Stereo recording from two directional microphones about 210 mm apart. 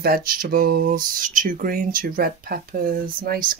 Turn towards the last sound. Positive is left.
turn(degrees=-45)  # may be behind; listen again after turning